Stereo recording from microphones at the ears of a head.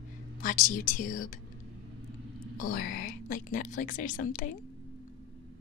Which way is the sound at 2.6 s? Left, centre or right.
Left.